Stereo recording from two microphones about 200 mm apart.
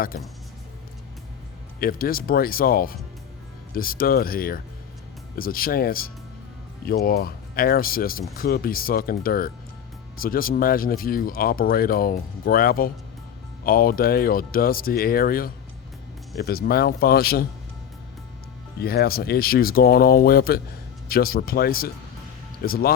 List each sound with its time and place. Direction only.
1.8 s speech: 45° left (ahead or behind)
18.8 s speech: 50° left (ahead or behind)